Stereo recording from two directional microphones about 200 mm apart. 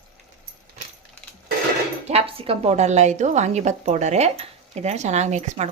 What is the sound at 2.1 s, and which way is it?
A woman's voice, 30° right (ahead or behind).